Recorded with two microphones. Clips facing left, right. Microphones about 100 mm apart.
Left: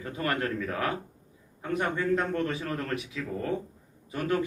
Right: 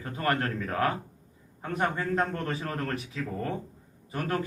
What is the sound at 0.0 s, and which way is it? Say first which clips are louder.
A man's voice: right 1 dB; 40° right (ahead or behind).